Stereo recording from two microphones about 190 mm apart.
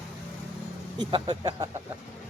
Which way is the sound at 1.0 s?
25° right (ahead or behind).